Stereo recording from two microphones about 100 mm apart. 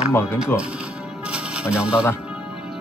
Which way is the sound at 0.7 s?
10° right (ahead or behind).